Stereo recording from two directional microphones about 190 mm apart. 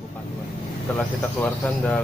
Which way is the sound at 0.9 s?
5° left (ahead or behind).